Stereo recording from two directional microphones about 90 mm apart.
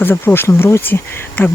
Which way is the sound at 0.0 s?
25° left (ahead or behind).